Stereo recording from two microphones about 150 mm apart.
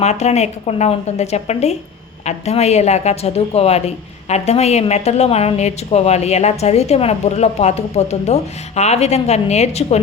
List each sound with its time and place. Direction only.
0.0 s a woman's voice: 45° left (ahead or behind)